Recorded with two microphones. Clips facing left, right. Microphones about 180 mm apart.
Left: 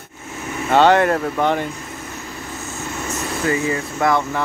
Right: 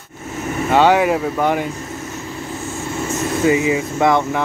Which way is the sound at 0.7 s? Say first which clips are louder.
Even; 10° right (ahead or behind).